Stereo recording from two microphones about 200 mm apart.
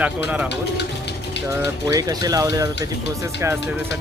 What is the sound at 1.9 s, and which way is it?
Speech, 20° right (ahead or behind).